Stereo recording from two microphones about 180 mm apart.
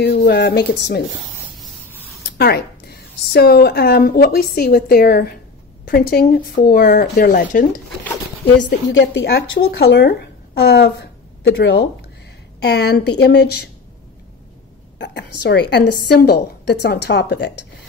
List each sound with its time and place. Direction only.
0.0 s a woman's voice: 65° left (ahead or behind)
2.3 s a woman's voice: 60° left (ahead or behind)
8.5 s a woman's voice: 80° left
15.0 s a woman's voice: 65° left (ahead or behind)